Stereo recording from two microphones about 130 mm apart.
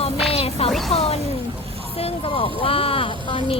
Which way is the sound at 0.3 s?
50° left (ahead or behind).